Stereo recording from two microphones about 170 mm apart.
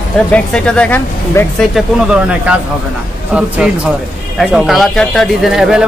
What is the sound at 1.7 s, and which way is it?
Speech, 5° right (ahead or behind).